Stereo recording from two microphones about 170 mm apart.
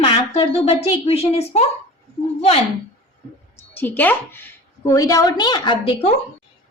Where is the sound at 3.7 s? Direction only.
10° left (ahead or behind).